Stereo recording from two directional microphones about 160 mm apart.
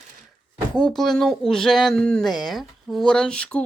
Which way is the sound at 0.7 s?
Centre (ahead or behind).